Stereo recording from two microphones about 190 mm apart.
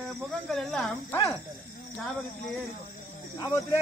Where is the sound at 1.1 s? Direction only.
15° left (ahead or behind).